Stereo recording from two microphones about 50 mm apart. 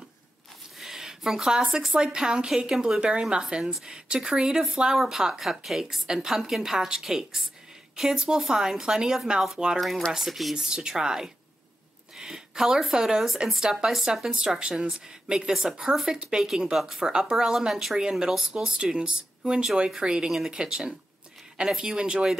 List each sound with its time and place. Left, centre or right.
0.7 s a woman's voice: centre
21.9 s speech: centre